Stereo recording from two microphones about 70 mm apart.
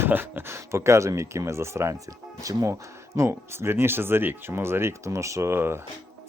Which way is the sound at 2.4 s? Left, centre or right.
Right.